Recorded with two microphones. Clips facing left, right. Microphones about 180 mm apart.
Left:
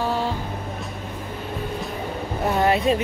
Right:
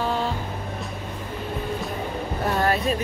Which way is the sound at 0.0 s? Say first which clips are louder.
Left 1 dB; 10° left (ahead or behind).